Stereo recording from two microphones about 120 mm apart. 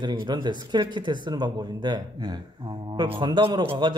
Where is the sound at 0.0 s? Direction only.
40° right (ahead or behind).